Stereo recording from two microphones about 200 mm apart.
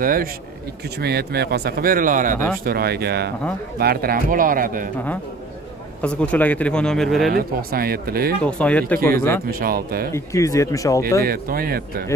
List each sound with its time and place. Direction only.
0.0 s speech: 45° right (ahead or behind)
2.3 s speech: 10° left (ahead or behind)
2.6 s speech: 50° right (ahead or behind)
6.0 s speech: 5° left (ahead or behind)
7.2 s speech: 50° right (ahead or behind)
8.5 s speech: 5° left (ahead or behind)
9.5 s speech: 45° right (ahead or behind)
10.1 s speech: 15° left (ahead or behind)
11.2 s speech: 50° right (ahead or behind)